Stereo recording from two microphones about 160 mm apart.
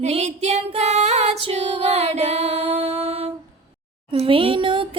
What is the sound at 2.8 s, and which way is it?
Music, 40° right (ahead or behind).